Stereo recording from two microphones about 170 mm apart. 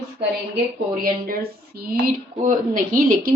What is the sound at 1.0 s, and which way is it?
Speech, 60° right (ahead or behind).